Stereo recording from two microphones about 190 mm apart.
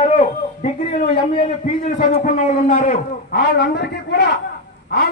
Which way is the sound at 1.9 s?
40° left (ahead or behind).